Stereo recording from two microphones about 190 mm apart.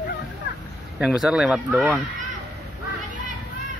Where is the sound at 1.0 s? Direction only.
5° right (ahead or behind).